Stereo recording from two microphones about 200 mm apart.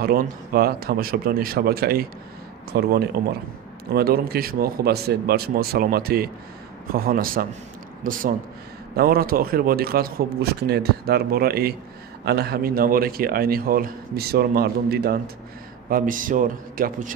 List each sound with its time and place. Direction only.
0.0 s a man's voice: 45° right (ahead or behind)
3.9 s a man's voice: 50° right (ahead or behind)